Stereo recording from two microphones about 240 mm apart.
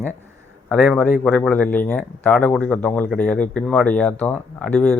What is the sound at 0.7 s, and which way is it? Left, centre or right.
A man's voice, centre.